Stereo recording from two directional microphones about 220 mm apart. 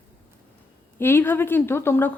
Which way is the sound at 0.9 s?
10° left (ahead or behind).